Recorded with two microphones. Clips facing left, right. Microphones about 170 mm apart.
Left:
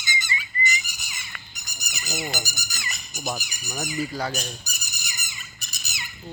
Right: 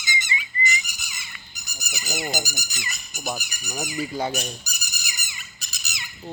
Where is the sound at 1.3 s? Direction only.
60° left (ahead or behind).